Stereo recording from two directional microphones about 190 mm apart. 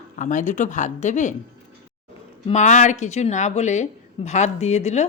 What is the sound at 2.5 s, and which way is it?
A woman's voice, 40° left (ahead or behind).